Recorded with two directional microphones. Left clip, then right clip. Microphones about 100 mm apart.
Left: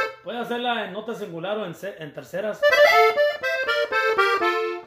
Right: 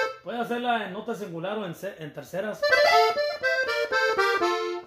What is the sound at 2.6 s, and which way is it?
Accordion, 5° left (ahead or behind).